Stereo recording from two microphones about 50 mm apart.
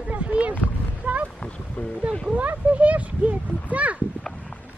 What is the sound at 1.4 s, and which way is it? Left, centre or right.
Speech, left.